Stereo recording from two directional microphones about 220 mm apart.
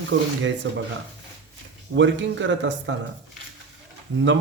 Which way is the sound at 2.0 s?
55° right (ahead or behind).